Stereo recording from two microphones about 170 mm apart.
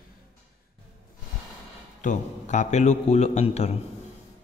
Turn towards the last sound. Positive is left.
turn(degrees=40)  # may be behind; listen again after turning